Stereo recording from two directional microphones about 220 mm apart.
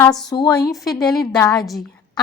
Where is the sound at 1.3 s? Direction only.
15° left (ahead or behind).